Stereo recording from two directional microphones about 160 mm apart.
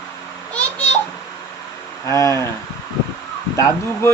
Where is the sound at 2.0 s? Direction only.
20° left (ahead or behind).